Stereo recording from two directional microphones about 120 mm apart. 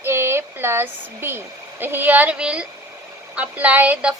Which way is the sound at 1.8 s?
15° right (ahead or behind).